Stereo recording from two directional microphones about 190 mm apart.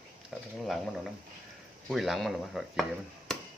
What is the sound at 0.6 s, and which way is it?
Dishes, centre (ahead or behind).